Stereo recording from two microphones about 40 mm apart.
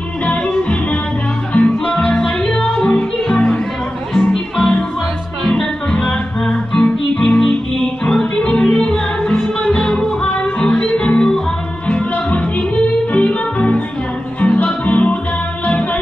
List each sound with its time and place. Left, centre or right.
1.5 s music: left
4.1 s music: centre
5.5 s music: left